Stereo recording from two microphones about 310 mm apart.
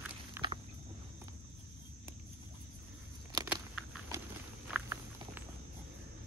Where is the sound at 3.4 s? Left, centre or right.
Centre.